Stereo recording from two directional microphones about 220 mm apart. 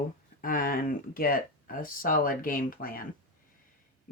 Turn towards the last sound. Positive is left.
turn(degrees=40)  # may be behind; listen again after turning